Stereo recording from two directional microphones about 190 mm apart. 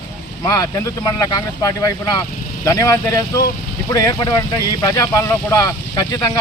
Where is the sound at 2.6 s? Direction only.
15° left (ahead or behind).